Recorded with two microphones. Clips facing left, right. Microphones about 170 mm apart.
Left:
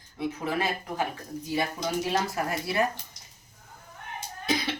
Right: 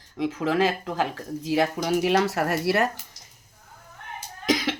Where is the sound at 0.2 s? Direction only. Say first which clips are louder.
Right 6 dB; 90° right; by 2.9 s 70° right (ahead or behind).